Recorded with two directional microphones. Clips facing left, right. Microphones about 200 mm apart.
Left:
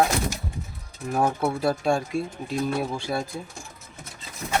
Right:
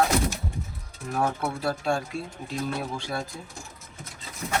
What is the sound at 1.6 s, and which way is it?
Speech, 15° left (ahead or behind).